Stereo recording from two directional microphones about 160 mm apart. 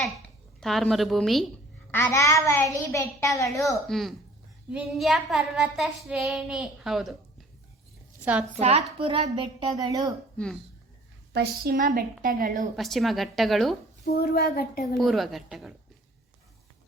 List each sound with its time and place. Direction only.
0.6 s child singing: centre (ahead or behind)
1.9 s a child's voice: 15° left (ahead or behind)
3.8 s child singing: centre (ahead or behind)
8.2 s a woman's voice: 10° right (ahead or behind)
8.5 s a woman's voice: 40° right (ahead or behind); by 10.1 s 25° right (ahead or behind)
10.3 s speech: 5° left (ahead or behind)
11.3 s a woman's voice: 65° right (ahead or behind)
12.7 s child singing: centre (ahead or behind)
14.0 s a child's voice: 75° left (ahead or behind)
14.9 s child singing: centre (ahead or behind)